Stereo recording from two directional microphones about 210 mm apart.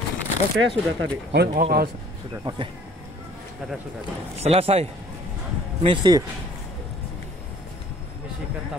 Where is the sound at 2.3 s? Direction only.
25° right (ahead or behind).